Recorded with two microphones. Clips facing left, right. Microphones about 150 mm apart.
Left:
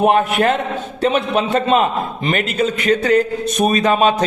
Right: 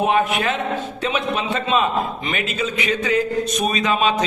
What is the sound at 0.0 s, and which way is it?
A man's voice, 55° left (ahead or behind).